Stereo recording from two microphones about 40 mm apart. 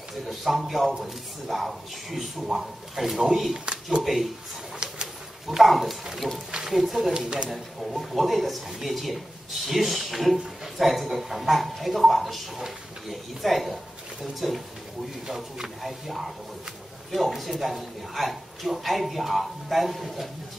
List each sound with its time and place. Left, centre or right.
0.3 s a man's voice: centre
3.5 s speech: right
4.0 s speech: centre
4.8 s pigeon: right
5.6 s speech: centre
6.1 s speech: centre
6.7 s speech: centre
7.2 s speech: right
7.4 s a man's voice: centre